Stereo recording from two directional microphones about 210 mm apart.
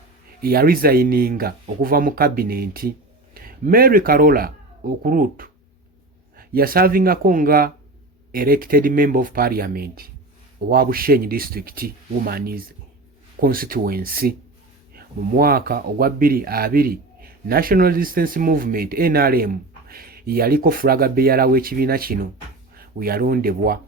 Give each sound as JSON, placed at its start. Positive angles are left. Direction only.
{"t": 0.4, "sound": "speech", "side_deg": -45}